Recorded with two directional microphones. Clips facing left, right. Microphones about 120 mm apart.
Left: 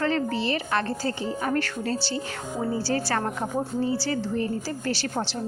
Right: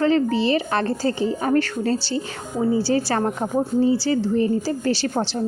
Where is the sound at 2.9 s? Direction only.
20° right (ahead or behind).